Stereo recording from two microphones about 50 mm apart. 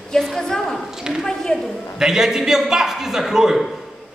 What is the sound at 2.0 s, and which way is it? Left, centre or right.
A man's voice, centre.